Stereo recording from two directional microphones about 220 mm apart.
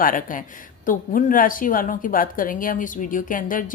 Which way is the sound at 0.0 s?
40° left (ahead or behind).